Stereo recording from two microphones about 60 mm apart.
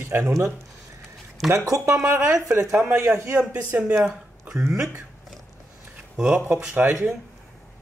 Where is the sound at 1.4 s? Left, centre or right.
Right.